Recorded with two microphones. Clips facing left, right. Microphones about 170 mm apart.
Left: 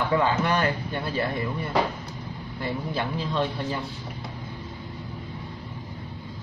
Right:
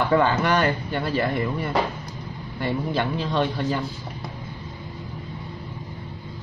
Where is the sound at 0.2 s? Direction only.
80° right.